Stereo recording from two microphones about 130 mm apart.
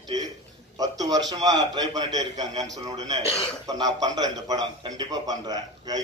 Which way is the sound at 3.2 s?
50° left (ahead or behind).